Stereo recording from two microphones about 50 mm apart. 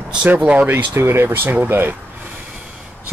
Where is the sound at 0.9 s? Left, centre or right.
Right.